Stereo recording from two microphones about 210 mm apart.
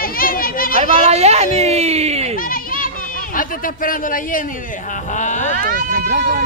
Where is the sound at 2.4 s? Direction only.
40° left (ahead or behind).